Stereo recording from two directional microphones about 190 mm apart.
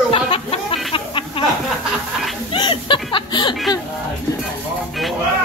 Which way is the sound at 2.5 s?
25° left (ahead or behind).